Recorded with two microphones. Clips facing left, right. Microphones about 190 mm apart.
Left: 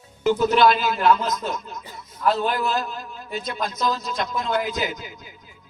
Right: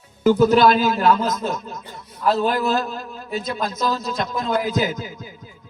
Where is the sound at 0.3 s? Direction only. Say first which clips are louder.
Right 4 dB; 40° right (ahead or behind).